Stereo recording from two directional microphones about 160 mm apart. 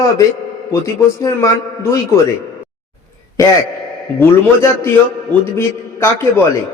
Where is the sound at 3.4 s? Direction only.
20° left (ahead or behind).